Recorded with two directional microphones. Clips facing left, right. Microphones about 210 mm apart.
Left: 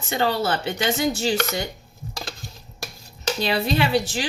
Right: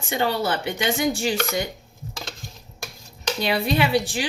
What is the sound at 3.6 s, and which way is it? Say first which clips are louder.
Speech: right 1 dB; 15° right (ahead or behind).